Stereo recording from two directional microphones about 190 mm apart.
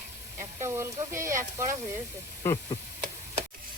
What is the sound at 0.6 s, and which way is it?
Speech, 15° right (ahead or behind).